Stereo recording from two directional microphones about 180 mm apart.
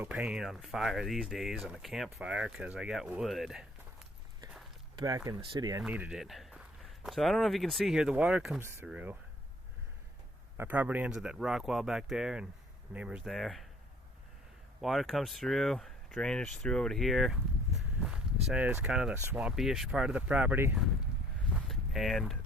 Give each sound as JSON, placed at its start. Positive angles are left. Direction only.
{"t": 0.0, "sound": "speech", "side_deg": -5}
{"t": 4.9, "sound": "speech", "side_deg": -20}
{"t": 5.8, "sound": "speech", "side_deg": -5}
{"t": 10.6, "sound": "speech", "side_deg": -10}
{"t": 14.8, "sound": "speech", "side_deg": 0}
{"t": 17.7, "sound": "walk", "side_deg": -5}
{"t": 18.5, "sound": "speech", "side_deg": -5}
{"t": 21.5, "sound": "a sound", "side_deg": 0}